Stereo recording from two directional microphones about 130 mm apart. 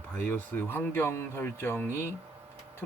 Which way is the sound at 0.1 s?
15° left (ahead or behind).